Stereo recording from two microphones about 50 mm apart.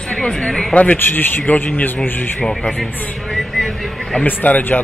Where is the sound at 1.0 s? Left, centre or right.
Left.